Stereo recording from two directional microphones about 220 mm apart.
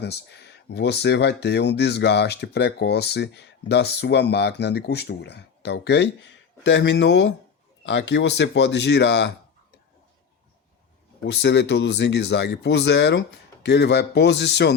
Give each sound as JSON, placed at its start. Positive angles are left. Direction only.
{"t": 0.0, "sound": "speech", "side_deg": 50}
{"t": 11.2, "sound": "speech", "side_deg": 50}